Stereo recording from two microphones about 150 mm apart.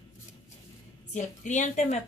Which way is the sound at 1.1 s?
55° left (ahead or behind).